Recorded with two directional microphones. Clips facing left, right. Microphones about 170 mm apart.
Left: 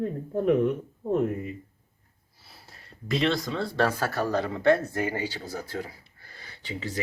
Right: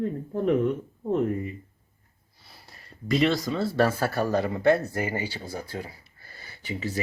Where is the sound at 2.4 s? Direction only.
Centre (ahead or behind).